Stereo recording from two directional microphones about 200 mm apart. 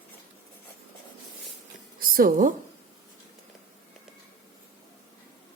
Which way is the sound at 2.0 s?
45° right (ahead or behind).